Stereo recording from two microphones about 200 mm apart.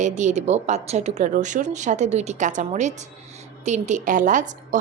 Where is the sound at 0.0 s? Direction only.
35° right (ahead or behind).